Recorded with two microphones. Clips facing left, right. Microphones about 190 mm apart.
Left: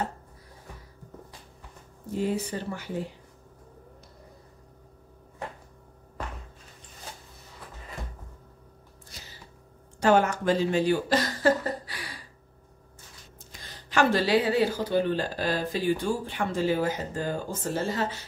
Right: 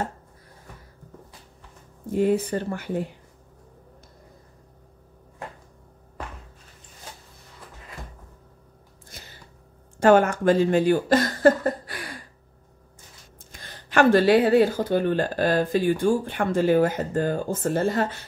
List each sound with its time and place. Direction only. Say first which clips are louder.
2.1 s speech: right 7 dB; 55° right (ahead or behind)
9.1 s a sound: right 3 dB; 55° right (ahead or behind)
9.9 s speech: right 5 dB; 55° right (ahead or behind)
13.5 s a woman's voice: right 4 dB; 55° right (ahead or behind)